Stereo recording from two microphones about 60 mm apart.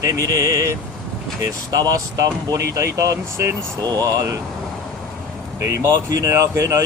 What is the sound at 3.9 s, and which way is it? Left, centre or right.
Speech, right.